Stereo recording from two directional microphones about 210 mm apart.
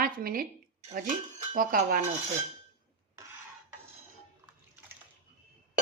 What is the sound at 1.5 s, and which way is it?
Cutlery, 40° right (ahead or behind).